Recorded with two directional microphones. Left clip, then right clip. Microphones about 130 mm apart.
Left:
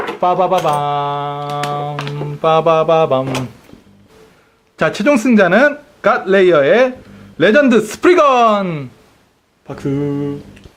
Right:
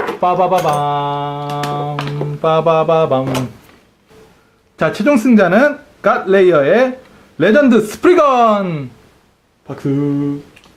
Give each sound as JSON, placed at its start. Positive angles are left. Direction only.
{"t": 0.2, "sound": "speech", "side_deg": 30}
{"t": 2.0, "sound": "a sound", "side_deg": 15}
{"t": 4.8, "sound": "speech", "side_deg": 30}